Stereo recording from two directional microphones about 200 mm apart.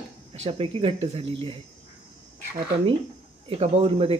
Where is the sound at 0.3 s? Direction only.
30° right (ahead or behind).